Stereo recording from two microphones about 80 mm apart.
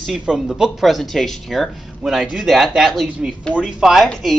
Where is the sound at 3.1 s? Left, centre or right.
Centre.